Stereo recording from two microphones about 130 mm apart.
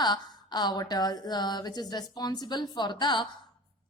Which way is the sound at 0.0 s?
35° left (ahead or behind).